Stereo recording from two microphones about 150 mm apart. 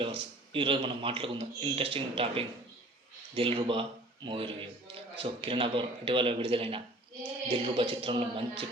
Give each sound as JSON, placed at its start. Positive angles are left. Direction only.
{"t": 0.0, "sound": "a man's voice", "side_deg": -35}